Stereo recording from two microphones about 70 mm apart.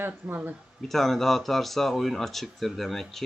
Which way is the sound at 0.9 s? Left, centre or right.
Centre.